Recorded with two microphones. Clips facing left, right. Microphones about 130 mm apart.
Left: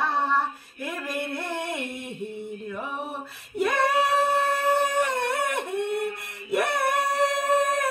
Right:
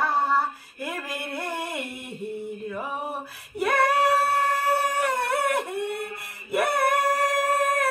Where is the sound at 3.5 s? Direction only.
5° right (ahead or behind).